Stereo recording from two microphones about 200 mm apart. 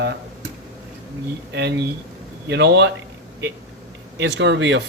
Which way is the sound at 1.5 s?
60° right (ahead or behind).